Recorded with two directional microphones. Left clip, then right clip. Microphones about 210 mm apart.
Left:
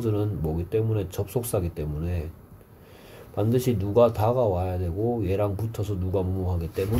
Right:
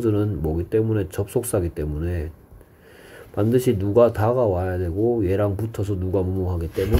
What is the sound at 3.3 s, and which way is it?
Speech, 25° right (ahead or behind).